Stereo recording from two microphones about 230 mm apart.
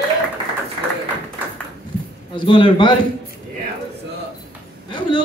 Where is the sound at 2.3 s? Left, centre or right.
Left.